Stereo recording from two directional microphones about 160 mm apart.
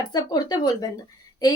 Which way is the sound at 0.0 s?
25° left (ahead or behind).